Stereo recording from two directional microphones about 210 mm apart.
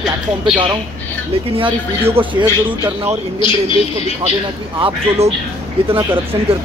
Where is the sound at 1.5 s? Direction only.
25° right (ahead or behind).